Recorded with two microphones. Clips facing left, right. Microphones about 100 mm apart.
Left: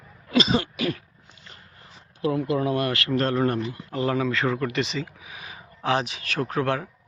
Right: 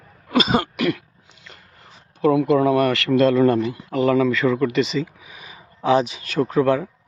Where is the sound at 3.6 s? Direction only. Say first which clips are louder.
Right 6 dB; 90° right.